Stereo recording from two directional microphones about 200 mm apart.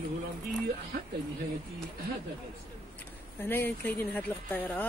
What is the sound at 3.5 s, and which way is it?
Speech, 10° left (ahead or behind).